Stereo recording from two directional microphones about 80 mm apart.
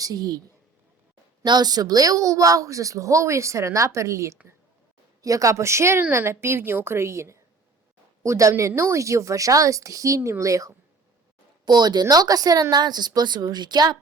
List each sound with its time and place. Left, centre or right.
0.0 s a woman's voice: right
1.5 s a woman's voice: right
11.6 s speech: right